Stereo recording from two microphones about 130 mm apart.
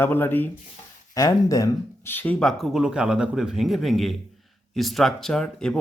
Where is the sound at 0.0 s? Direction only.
15° left (ahead or behind).